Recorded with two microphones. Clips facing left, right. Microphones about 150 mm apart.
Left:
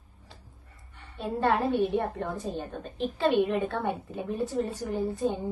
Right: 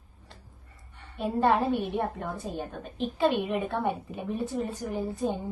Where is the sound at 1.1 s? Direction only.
Centre (ahead or behind).